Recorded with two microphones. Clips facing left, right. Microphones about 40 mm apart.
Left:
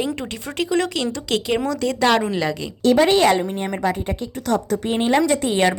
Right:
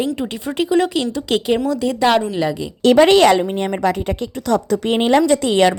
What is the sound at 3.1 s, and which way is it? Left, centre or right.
Speech, right.